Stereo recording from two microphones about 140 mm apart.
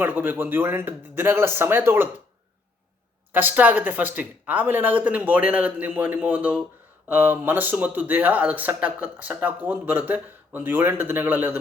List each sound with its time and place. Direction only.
0.0 s speech: 15° right (ahead or behind)
3.3 s speech: 10° right (ahead or behind)